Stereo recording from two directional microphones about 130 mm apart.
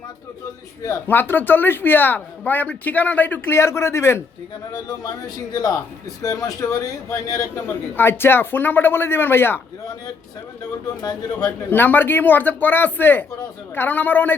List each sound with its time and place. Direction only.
0.8 s speech: 20° left (ahead or behind)
11.0 s speech: 30° left (ahead or behind)
11.7 s speech: 15° left (ahead or behind)